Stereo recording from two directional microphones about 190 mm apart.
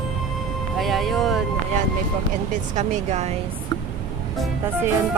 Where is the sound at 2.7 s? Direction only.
40° right (ahead or behind).